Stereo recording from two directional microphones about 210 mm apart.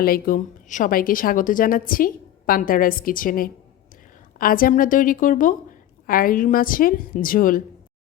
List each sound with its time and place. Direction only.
0.0 s a woman's voice: 45° left (ahead or behind)